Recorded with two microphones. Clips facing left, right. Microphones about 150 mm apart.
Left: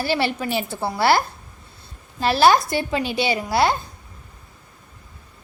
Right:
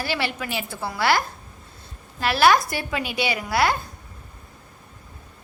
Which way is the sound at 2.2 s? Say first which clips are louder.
Left 2 dB; 30° left (ahead or behind).